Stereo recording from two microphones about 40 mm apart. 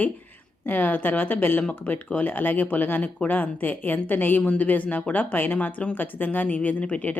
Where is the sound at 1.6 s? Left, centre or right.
Left.